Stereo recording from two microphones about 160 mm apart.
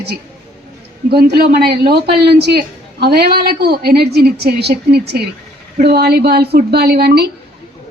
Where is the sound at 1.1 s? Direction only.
75° right (ahead or behind).